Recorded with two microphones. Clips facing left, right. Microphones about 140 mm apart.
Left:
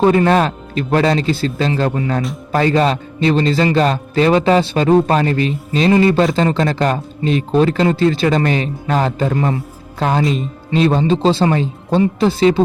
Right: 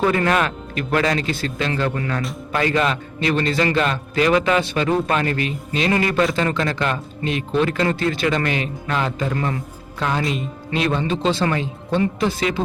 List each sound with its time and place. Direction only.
0.0 s a man's voice: 30° left (ahead or behind)
10.0 s a man's voice: 40° left (ahead or behind)